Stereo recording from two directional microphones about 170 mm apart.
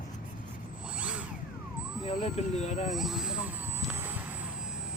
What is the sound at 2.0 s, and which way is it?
Speech, 35° left (ahead or behind).